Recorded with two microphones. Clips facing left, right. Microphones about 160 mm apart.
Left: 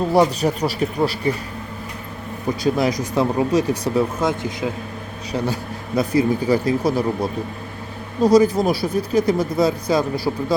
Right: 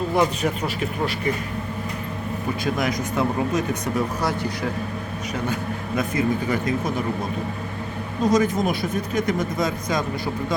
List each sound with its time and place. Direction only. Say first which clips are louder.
0.1 s speech: left 5 dB; 35° left (ahead or behind)
2.6 s speech: left 6 dB; 35° left (ahead or behind)
4.2 s a man's voice: left 3 dB; 20° left (ahead or behind)
6.0 s speech: left 5 dB; 35° left (ahead or behind)